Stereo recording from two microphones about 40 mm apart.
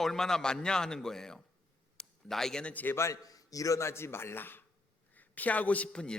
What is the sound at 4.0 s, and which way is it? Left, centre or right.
Speech, left.